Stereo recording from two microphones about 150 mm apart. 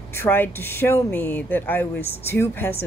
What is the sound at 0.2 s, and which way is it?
A woman's voice, 15° left (ahead or behind).